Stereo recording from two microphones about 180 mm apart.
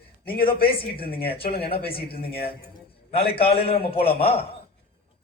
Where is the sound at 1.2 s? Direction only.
30° left (ahead or behind).